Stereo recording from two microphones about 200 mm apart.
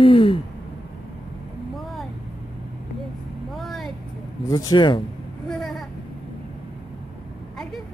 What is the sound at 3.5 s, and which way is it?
Vehicle, centre (ahead or behind).